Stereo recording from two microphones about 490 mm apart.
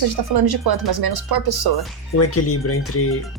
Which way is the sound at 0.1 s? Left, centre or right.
Right.